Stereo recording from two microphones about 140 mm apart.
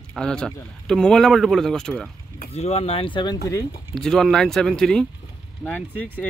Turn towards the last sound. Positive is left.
turn(degrees=10)  # may be behind; listen again after turning